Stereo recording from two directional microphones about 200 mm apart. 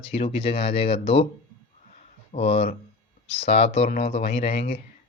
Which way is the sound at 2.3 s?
30° left (ahead or behind).